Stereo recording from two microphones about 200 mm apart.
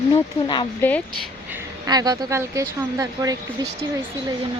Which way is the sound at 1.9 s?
20° right (ahead or behind).